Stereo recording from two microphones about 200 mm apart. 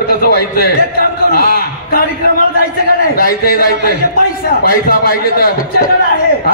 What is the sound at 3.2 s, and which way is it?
A man's voice, 50° left (ahead or behind).